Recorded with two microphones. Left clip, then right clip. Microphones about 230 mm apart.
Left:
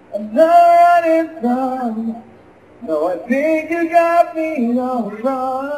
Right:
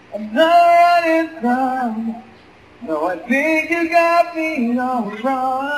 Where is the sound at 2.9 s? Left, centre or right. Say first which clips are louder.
Left 1 dB; right.